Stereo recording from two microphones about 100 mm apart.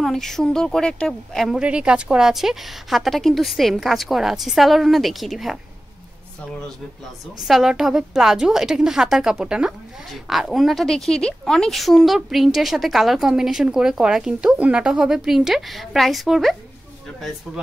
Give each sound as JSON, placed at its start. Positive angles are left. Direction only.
{"t": 0.0, "sound": "a woman's voice", "side_deg": 5}
{"t": 1.6, "sound": "a woman's voice", "side_deg": -10}
{"t": 7.4, "sound": "a woman's voice", "side_deg": -5}